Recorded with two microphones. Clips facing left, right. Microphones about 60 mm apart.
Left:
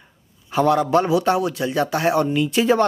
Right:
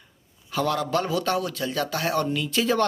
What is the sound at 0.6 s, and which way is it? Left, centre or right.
Speech, left.